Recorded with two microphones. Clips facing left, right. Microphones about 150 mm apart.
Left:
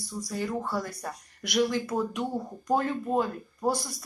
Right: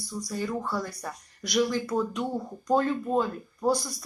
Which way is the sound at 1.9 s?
10° left (ahead or behind).